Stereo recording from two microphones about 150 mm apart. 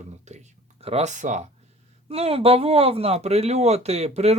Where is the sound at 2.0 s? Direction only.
40° right (ahead or behind).